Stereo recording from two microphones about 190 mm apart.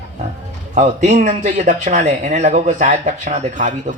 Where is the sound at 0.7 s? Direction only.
40° right (ahead or behind).